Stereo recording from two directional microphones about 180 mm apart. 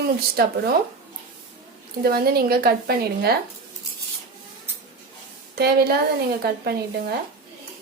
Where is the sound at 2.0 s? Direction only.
60° right (ahead or behind).